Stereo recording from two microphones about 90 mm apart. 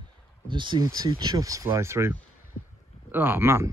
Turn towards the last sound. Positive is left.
turn(degrees=-30)  # may be behind; listen again after turning